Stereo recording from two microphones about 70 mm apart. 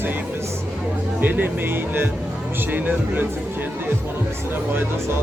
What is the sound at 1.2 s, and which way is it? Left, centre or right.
Speech, right.